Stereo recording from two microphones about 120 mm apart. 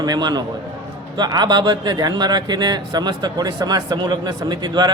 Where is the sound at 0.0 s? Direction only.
35° right (ahead or behind).